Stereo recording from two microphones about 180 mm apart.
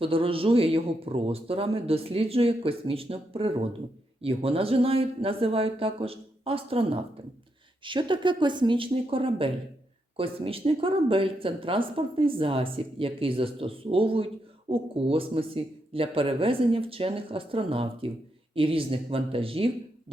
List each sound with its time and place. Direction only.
0.0 s speech: 30° right (ahead or behind)